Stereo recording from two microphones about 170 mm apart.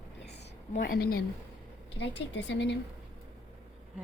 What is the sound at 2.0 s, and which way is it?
Speech, 90° left.